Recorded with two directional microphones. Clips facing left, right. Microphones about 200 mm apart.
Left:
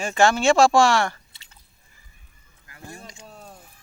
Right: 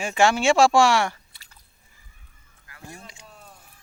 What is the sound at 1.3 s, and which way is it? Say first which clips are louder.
Chewing: even; 25° left (ahead or behind).